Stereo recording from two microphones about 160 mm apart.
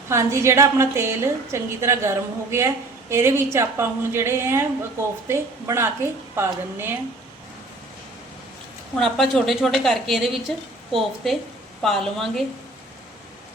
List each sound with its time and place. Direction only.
0.1 s a woman's voice: 15° right (ahead or behind)
9.0 s a woman's voice: centre (ahead or behind)